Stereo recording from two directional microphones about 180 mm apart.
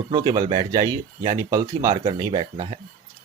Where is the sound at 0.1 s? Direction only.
25° right (ahead or behind).